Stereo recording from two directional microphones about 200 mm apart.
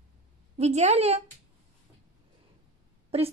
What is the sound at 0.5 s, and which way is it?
Speech, 35° right (ahead or behind).